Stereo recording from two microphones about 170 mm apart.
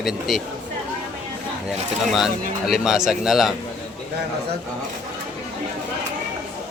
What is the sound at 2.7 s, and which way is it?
Speech, 5° right (ahead or behind).